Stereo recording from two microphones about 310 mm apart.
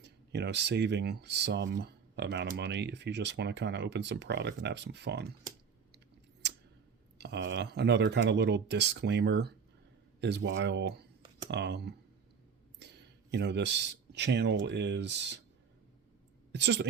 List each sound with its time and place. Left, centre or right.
0.0 s speech: right
7.2 s speech: right
16.5 s a woman's voice: right